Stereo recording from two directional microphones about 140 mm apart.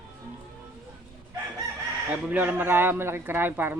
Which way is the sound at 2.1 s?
10° right (ahead or behind).